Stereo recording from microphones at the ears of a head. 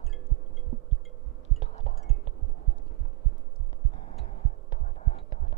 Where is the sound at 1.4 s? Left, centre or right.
Right.